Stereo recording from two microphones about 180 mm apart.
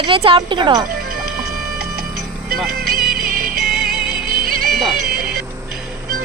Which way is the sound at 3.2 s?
50° right (ahead or behind).